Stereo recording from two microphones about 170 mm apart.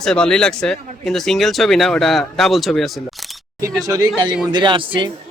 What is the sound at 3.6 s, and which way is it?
Speech, 20° right (ahead or behind).